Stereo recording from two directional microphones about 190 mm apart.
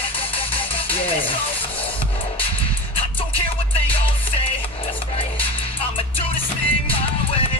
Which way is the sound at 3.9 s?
30° left (ahead or behind).